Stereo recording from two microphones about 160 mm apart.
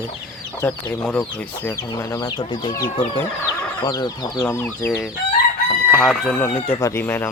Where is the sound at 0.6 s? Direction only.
15° left (ahead or behind); by 2.7 s 30° left (ahead or behind).